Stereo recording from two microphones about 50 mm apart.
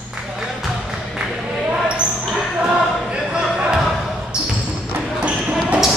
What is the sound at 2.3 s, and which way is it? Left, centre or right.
Basketball bounce, centre.